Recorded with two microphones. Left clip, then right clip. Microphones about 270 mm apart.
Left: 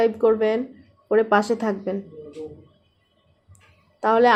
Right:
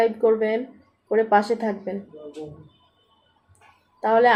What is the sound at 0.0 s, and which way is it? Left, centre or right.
Speech, left.